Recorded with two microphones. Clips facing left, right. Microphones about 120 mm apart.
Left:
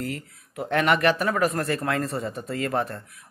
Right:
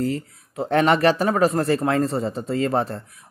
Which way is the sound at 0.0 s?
30° right (ahead or behind).